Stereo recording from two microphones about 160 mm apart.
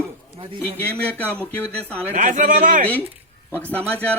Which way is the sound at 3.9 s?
10° left (ahead or behind).